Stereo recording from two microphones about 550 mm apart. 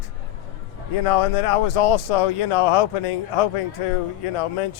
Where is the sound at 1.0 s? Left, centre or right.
Left.